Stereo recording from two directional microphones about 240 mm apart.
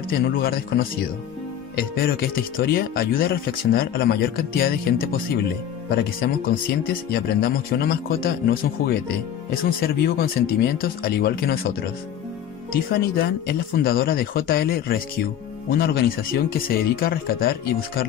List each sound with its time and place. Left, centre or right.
0.1 s speech: left
12.9 s speech: left